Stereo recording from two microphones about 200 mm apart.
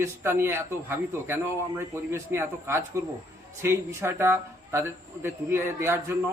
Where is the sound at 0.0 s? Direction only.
10° right (ahead or behind).